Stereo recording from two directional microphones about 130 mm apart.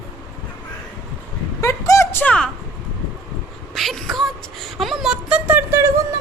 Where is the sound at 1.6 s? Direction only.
25° left (ahead or behind).